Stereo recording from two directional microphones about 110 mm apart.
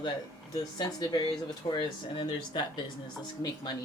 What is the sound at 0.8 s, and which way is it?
Speech, 40° left (ahead or behind).